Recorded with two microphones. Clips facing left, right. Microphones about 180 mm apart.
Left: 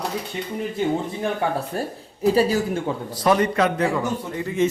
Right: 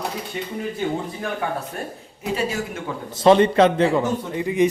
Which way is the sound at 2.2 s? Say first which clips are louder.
Left 6 dB; 35° left (ahead or behind).